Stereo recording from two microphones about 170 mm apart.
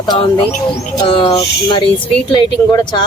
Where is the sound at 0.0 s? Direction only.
25° left (ahead or behind).